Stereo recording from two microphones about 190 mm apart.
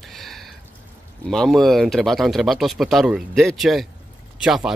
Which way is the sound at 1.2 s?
5° left (ahead or behind).